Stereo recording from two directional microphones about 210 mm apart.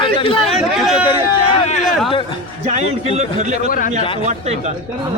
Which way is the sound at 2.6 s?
30° right (ahead or behind).